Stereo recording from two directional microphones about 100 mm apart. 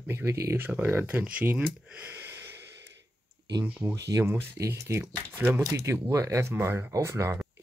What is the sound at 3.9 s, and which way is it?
Speech, 35° right (ahead or behind).